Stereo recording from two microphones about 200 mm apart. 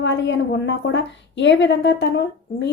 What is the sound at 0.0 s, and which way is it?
A woman's voice, 65° left (ahead or behind).